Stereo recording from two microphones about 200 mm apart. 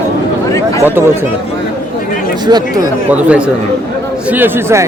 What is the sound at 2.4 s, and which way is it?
Speech, 20° right (ahead or behind).